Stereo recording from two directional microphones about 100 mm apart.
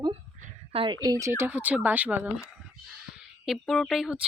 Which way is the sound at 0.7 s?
70° right (ahead or behind).